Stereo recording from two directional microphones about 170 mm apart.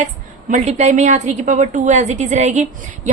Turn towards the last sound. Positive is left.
turn(degrees=-45)  # may be behind; listen again after turning